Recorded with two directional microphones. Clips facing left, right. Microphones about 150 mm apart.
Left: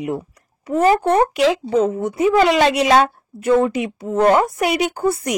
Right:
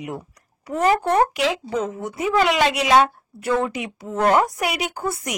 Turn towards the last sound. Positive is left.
turn(degrees=30)  # may be behind; listen again after turning